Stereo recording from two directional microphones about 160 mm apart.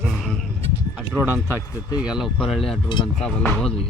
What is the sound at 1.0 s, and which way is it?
A man's voice, 10° right (ahead or behind).